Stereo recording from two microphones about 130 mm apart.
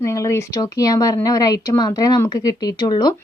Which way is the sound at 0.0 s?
25° left (ahead or behind).